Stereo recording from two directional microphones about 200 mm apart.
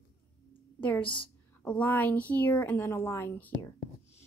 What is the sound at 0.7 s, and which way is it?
A woman's voice, 5° left (ahead or behind).